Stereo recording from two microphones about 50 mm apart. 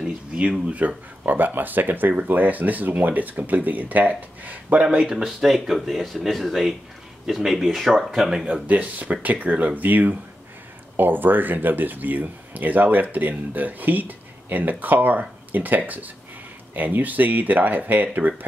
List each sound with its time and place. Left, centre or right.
0.7 s speech: right
5.0 s speech: centre
8.6 s speech: right